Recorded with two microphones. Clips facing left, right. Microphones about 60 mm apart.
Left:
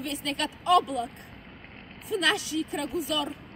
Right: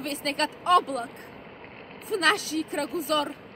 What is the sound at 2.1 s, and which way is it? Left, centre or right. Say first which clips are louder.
Speech: right 2 dB; right.